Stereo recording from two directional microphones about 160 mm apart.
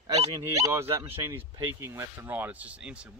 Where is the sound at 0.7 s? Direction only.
15° right (ahead or behind).